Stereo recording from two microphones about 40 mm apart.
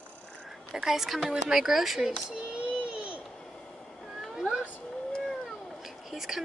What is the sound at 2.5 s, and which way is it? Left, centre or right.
Baby cry, right.